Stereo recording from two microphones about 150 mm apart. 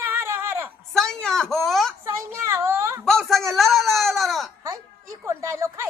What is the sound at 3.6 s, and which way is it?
Baby cry, centre (ahead or behind).